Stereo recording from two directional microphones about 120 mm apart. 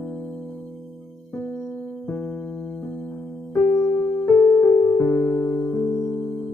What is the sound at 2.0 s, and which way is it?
Music, 20° left (ahead or behind).